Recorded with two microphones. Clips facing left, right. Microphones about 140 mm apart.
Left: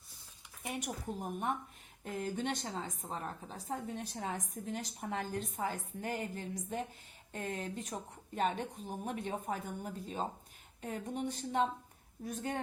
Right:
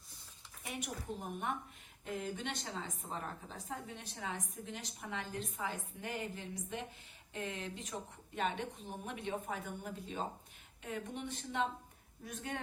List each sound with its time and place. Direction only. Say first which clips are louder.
0.7 s a woman's voice: left 3 dB; 40° left (ahead or behind)